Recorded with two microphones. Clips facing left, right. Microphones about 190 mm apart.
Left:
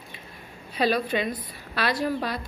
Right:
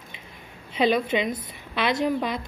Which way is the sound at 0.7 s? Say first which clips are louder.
Right 2 dB; 20° right (ahead or behind).